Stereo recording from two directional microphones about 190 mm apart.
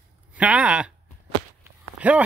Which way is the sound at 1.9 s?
5° right (ahead or behind).